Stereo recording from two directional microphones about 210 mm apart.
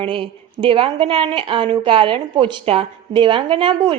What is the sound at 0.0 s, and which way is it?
A woman's voice, 25° right (ahead or behind).